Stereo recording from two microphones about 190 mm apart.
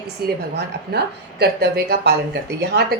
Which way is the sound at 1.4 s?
60° right (ahead or behind).